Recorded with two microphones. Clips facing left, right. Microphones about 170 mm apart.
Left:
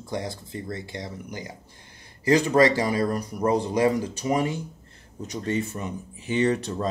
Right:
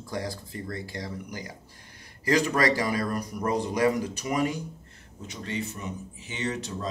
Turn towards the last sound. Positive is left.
turn(degrees=55)  # may be behind; listen again after turning